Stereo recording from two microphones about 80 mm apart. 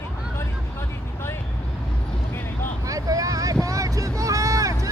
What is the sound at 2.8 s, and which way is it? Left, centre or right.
Vehicle, right.